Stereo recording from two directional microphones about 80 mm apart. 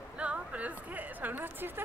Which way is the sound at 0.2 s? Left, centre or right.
Centre.